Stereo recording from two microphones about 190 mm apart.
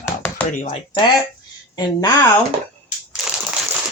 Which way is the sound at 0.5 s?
40° left (ahead or behind).